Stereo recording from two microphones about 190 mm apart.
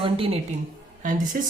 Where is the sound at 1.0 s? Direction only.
45° right (ahead or behind).